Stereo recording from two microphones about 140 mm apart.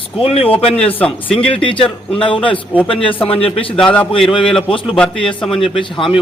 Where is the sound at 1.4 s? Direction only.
40° left (ahead or behind).